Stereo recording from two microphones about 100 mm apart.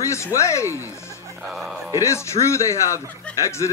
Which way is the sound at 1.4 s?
5° right (ahead or behind).